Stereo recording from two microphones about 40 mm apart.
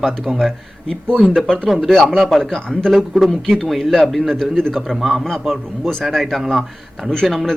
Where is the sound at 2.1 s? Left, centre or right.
Centre.